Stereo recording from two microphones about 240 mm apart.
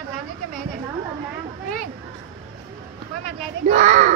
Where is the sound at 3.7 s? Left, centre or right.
Right.